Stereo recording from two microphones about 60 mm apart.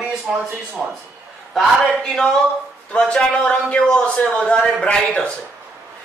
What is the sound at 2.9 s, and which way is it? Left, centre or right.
A man's voice, centre.